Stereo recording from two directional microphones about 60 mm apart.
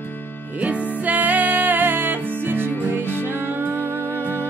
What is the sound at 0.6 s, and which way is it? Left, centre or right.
Music, right.